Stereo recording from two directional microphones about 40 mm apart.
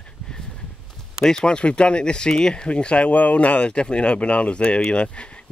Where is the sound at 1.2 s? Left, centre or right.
Centre.